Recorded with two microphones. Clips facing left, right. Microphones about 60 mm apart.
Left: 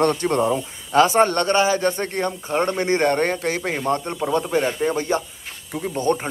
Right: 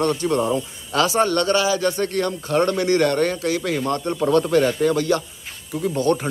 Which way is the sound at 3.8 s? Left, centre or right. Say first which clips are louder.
Right 1 dB; left.